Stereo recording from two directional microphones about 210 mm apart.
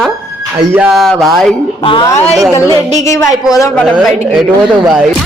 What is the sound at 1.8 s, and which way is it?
Speech, 25° left (ahead or behind).